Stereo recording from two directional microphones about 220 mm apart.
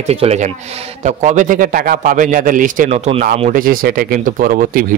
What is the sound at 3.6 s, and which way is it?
Speech, 40° right (ahead or behind).